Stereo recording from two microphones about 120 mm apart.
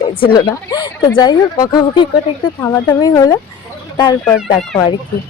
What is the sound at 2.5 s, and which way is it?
A woman's voice, 20° left (ahead or behind).